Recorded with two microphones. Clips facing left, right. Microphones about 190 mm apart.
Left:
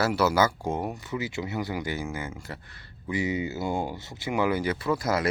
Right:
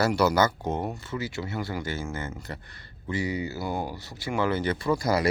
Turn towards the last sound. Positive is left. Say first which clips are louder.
# right 1 dB
turn(degrees=0)  # may be behind; listen again after turning